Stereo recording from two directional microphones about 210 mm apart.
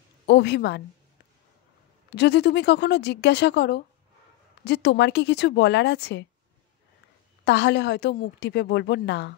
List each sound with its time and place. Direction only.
0.3 s a woman's voice: 55° left (ahead or behind)
2.0 s a woman's voice: 50° left (ahead or behind)
7.4 s a woman's voice: 55° left (ahead or behind)